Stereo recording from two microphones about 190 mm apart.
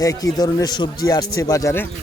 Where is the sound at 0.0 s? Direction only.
20° left (ahead or behind).